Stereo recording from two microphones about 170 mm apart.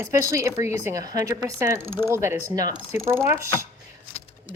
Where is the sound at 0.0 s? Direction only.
20° right (ahead or behind).